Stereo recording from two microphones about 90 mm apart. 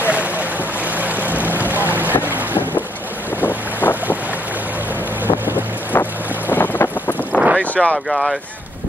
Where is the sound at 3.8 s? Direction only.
20° left (ahead or behind).